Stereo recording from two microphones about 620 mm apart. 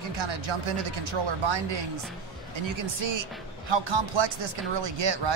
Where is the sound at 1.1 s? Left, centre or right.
Right.